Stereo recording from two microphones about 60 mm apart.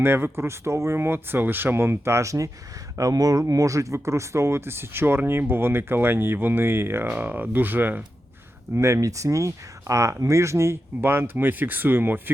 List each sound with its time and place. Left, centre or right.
0.0 s speech: right
3.0 s speech: right
7.1 s speech: right
8.7 s speech: right